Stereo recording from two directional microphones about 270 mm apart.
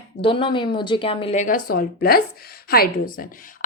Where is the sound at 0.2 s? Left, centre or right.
Centre.